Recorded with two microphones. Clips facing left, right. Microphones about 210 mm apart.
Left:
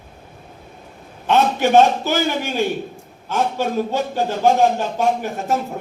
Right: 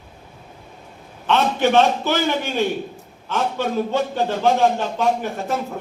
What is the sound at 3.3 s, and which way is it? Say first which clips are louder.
A man's voice: left 1 dB; 40° left (ahead or behind).